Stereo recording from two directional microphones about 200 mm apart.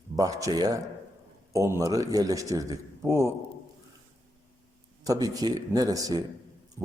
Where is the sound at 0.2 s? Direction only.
15° right (ahead or behind).